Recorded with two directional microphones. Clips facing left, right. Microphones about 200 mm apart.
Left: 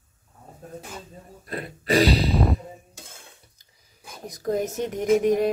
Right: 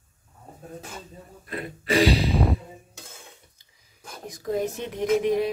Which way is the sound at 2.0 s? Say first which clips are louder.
Even; 40° left (ahead or behind).